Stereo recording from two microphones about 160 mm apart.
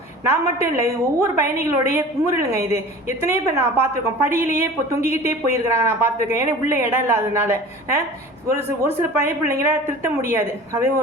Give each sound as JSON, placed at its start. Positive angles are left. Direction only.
{"t": 0.3, "sound": "a woman's voice", "side_deg": -15}